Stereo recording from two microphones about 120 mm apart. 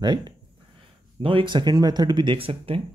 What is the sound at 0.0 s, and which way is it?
Speech, 40° right (ahead or behind).